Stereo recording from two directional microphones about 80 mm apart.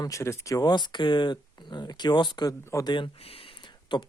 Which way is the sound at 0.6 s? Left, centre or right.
Left.